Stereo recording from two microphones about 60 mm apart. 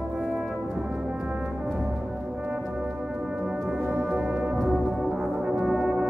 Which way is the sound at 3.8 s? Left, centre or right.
Right.